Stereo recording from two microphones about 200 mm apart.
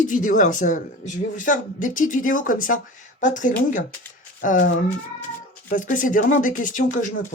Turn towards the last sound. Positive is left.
turn(degrees=40)  # may be behind; listen again after turning